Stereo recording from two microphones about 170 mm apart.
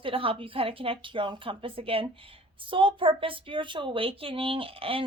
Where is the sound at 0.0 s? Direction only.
30° right (ahead or behind).